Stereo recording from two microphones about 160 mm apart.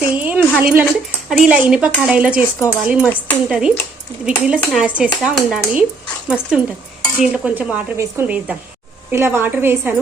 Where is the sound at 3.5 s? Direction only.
5° right (ahead or behind).